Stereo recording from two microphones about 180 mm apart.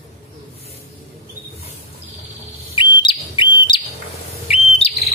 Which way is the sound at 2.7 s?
25° left (ahead or behind).